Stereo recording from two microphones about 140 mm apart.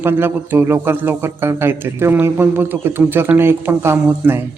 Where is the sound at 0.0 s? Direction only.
15° right (ahead or behind).